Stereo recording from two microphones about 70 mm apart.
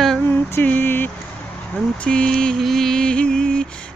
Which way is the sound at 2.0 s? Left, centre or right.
Centre.